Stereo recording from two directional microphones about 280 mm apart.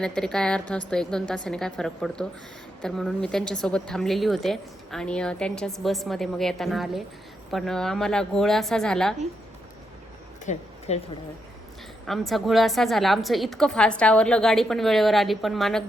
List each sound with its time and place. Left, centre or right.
0.0 s a woman's voice: centre
10.4 s a sound: left
12.0 s a woman's voice: centre